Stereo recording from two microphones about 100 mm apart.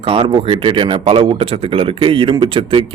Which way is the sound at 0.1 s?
60° right (ahead or behind).